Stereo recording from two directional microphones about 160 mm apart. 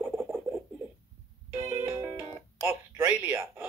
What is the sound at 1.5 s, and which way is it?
Music, 15° right (ahead or behind).